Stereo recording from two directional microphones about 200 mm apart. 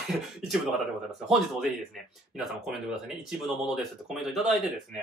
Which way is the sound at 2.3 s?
Centre (ahead or behind).